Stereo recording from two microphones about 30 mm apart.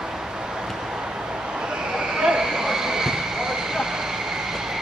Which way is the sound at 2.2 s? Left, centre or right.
Centre.